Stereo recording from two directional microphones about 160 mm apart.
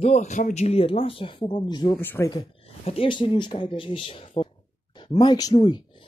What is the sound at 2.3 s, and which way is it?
Speech, 35° left (ahead or behind).